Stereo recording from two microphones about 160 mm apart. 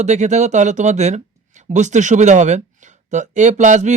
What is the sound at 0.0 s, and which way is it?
Speech, 45° right (ahead or behind).